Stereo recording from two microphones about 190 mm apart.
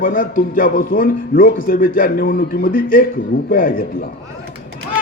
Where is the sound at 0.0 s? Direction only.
45° left (ahead or behind).